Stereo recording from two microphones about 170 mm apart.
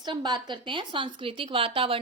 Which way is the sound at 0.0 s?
25° right (ahead or behind).